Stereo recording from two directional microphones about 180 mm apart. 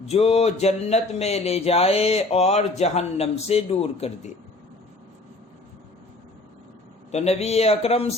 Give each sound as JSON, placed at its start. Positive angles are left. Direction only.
{"t": 0.1, "sound": "speech", "side_deg": 35}
{"t": 7.1, "sound": "speech", "side_deg": 35}